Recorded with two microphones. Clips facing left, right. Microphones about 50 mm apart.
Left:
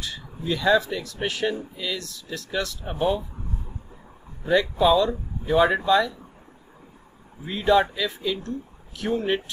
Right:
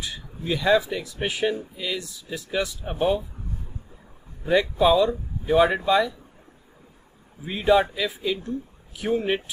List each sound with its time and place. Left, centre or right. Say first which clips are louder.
0.0 s speech: left 1 dB; centre
4.5 s speech: even; centre
7.4 s speech: even; centre